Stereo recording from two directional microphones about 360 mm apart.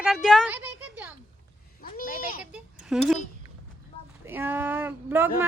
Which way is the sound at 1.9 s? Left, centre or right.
Left.